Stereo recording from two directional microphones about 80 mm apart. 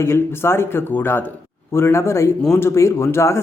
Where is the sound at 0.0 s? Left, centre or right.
Left.